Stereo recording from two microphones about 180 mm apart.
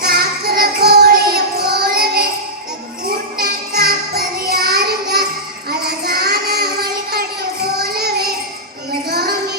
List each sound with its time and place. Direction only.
0.0 s music: 55° right (ahead or behind)
3.3 s music: 55° right (ahead or behind)
6.1 s child singing: 60° right (ahead or behind)
7.8 s child singing: 60° right (ahead or behind)